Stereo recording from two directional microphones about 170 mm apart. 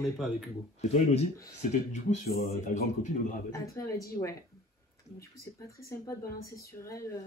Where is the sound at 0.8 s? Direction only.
40° left (ahead or behind).